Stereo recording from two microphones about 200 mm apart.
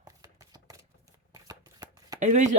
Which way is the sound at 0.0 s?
20° right (ahead or behind).